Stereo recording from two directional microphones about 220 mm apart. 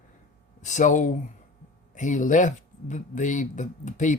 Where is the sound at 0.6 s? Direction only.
35° left (ahead or behind).